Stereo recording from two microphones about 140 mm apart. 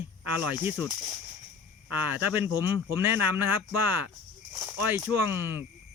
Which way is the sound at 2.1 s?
15° right (ahead or behind).